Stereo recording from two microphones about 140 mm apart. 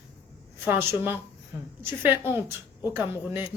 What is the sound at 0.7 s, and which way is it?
Speech, 15° right (ahead or behind).